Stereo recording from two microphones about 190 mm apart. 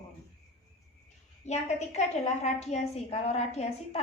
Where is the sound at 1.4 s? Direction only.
35° left (ahead or behind).